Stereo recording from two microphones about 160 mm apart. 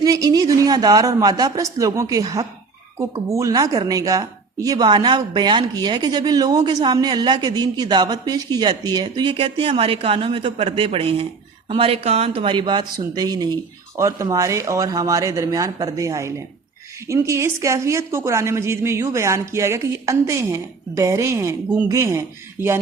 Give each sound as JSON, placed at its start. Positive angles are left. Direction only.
{"t": 0.0, "sound": "a woman's voice", "side_deg": -25}